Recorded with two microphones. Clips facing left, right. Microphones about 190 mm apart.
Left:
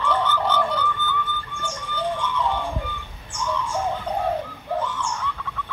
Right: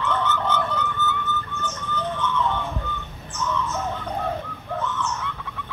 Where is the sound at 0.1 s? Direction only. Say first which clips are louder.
Left 2 dB; 30° left (ahead or behind).